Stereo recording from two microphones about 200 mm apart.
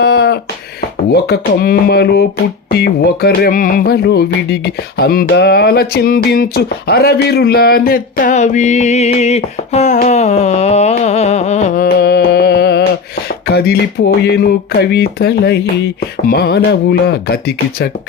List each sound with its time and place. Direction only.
0.0 s a sound: 55° left (ahead or behind)
1.1 s speech: 50° left (ahead or behind)
2.6 s music: 50° left (ahead or behind)
14.3 s speech: 55° left (ahead or behind)